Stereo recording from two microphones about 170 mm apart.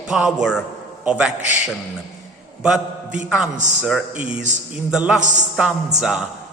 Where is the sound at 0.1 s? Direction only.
5° right (ahead or behind).